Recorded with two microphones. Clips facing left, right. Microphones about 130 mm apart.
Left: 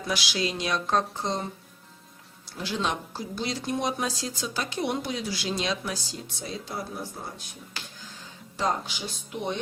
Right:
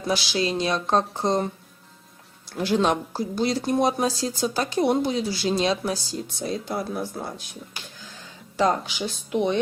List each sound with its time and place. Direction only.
0.1 s speech: 30° right (ahead or behind)
2.6 s speech: 50° right (ahead or behind); by 6.0 s 35° right (ahead or behind)
6.4 s speech: 55° right (ahead or behind)
8.5 s speech: 90° right